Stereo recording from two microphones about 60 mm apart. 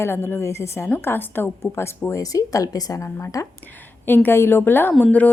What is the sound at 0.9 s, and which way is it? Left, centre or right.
A woman's voice, left.